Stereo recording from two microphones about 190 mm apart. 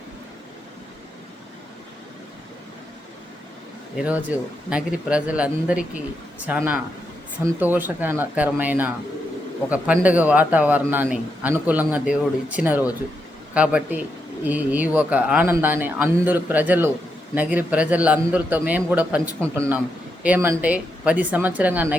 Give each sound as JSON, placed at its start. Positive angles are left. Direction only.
{"t": 3.9, "sound": "a man's voice", "side_deg": -5}